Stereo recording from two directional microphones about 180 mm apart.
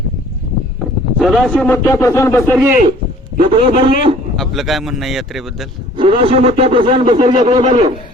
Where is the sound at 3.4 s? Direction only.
30° right (ahead or behind).